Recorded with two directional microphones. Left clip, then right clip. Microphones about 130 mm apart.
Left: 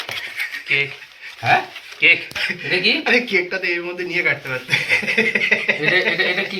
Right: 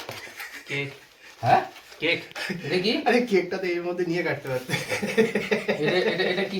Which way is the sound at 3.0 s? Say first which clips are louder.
Left 5 dB; 50° right (ahead or behind).